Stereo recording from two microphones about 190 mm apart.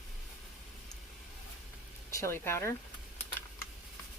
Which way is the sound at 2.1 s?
15° left (ahead or behind).